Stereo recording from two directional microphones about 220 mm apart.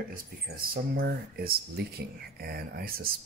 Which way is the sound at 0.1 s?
40° right (ahead or behind).